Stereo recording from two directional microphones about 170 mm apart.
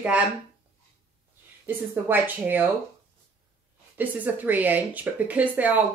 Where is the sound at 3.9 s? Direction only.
10° right (ahead or behind).